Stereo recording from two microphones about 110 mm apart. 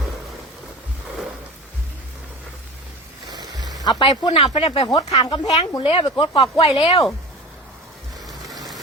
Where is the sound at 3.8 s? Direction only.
45° left (ahead or behind).